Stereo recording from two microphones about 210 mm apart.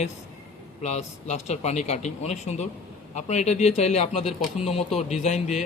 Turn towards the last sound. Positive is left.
turn(degrees=30)  # may be behind; listen again after turning